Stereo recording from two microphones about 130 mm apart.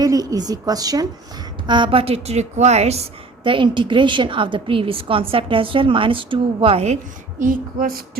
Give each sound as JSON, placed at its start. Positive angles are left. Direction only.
{"t": 0.0, "sound": "a woman's voice", "side_deg": -30}
{"t": 3.4, "sound": "a woman's voice", "side_deg": -40}